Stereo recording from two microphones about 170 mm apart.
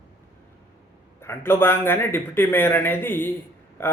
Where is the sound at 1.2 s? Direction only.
15° left (ahead or behind).